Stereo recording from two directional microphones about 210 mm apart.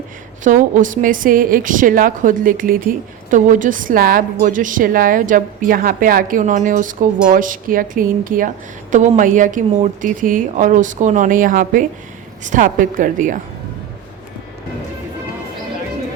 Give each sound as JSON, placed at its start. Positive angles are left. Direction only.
{"t": 0.4, "sound": "a woman's voice", "side_deg": -35}